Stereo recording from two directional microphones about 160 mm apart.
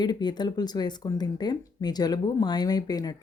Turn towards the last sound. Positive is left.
turn(degrees=25)  # may be behind; listen again after turning